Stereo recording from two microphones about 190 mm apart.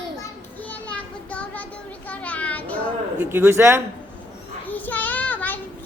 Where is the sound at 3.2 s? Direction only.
10° right (ahead or behind).